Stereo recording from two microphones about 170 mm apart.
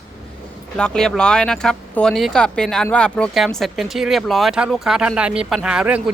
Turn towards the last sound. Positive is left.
turn(degrees=-5)  # may be behind; listen again after turning